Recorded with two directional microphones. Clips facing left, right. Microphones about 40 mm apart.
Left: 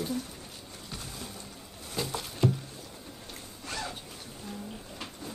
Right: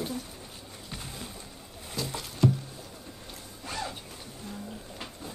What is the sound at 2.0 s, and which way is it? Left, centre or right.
Rowboat, left.